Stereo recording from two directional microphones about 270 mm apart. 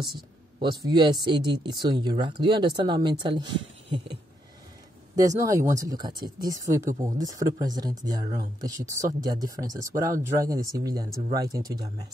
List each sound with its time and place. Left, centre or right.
0.0 s speech: centre
5.1 s speech: centre